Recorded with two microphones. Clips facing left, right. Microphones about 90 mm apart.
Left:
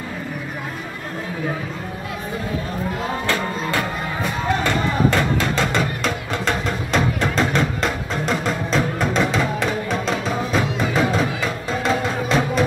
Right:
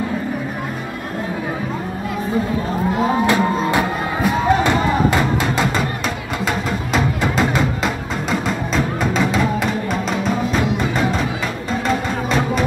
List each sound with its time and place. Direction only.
3.3 s music: 15° right (ahead or behind)